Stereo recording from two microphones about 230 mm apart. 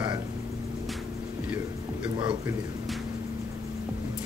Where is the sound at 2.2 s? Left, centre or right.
Centre.